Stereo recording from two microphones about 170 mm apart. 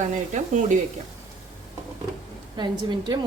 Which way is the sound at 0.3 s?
50° right (ahead or behind).